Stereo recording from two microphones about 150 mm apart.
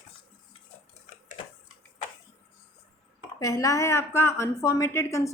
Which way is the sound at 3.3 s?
20° left (ahead or behind).